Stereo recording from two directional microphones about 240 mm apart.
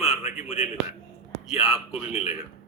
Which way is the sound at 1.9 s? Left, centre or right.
Left.